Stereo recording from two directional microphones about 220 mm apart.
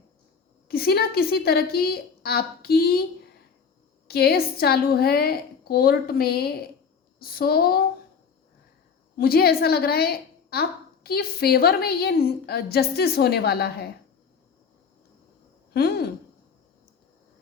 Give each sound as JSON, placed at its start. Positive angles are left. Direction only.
{"t": 0.7, "sound": "a woman's voice", "side_deg": 45}
{"t": 4.1, "sound": "a woman's voice", "side_deg": 45}
{"t": 9.1, "sound": "a woman's voice", "side_deg": 45}
{"t": 15.7, "sound": "speech", "side_deg": 45}